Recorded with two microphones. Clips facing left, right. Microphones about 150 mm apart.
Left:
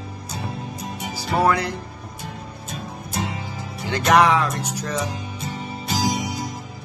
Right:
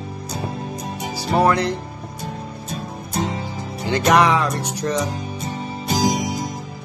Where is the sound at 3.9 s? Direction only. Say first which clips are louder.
Right 1 dB; centre (ahead or behind).